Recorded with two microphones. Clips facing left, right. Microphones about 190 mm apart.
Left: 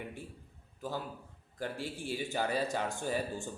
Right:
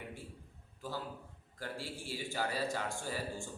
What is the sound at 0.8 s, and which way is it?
A man's voice, 15° left (ahead or behind).